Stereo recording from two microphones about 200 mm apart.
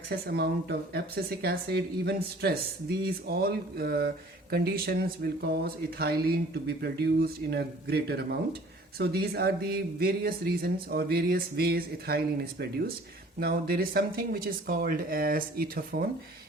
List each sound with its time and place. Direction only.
0.1 s speech: 50° right (ahead or behind)